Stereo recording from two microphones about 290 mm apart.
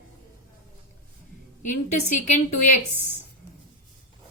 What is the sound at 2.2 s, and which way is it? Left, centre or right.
Speech, left.